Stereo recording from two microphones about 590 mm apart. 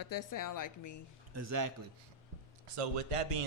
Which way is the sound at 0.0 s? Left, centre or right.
Left.